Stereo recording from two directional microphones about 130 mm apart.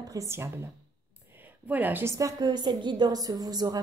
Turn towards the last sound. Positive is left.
turn(degrees=-30)  # may be behind; listen again after turning